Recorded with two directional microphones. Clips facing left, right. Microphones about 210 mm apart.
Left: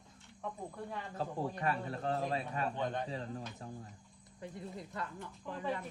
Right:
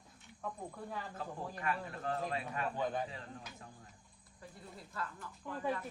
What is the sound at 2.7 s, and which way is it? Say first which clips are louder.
Speech: even; 5° right (ahead or behind).